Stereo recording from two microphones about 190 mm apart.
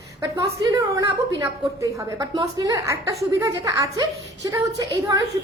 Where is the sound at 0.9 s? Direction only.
20° right (ahead or behind).